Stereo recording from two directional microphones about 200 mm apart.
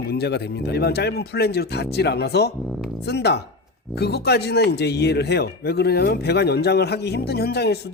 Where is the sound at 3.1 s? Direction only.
55° left (ahead or behind).